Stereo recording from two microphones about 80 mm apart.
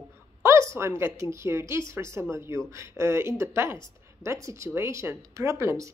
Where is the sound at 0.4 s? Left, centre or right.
Right.